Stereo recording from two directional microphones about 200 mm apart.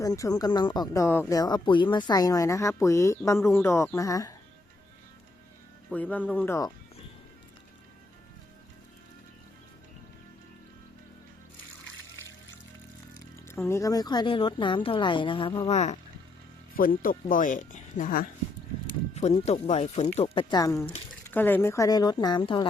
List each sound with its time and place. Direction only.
0.0 s speech: 15° left (ahead or behind)
5.9 s speech: 10° left (ahead or behind)
13.3 s speech: 15° left (ahead or behind); by 16.0 s 35° left (ahead or behind)
16.7 s speech: 45° left (ahead or behind)
19.1 s speech: 30° left (ahead or behind)